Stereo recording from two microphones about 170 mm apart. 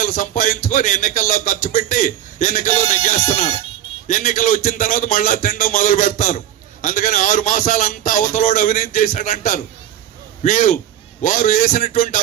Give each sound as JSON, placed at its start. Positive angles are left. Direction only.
{"t": 0.0, "sound": "speech", "side_deg": 50}
{"t": 4.0, "sound": "speech", "side_deg": 50}